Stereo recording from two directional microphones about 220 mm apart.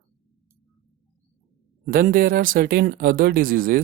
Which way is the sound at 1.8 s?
40° right (ahead or behind).